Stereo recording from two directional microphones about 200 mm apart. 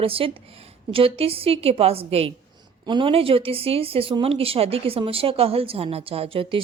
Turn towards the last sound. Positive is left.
turn(degrees=-25)  # may be behind; listen again after turning